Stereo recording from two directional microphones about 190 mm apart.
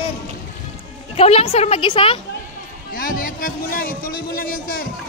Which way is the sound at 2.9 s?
45° left (ahead or behind).